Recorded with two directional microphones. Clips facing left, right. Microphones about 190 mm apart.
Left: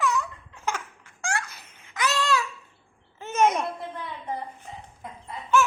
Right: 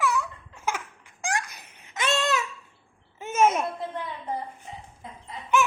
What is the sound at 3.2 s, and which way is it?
Babbling, 10° right (ahead or behind).